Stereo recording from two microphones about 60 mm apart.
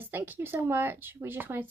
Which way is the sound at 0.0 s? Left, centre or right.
Right.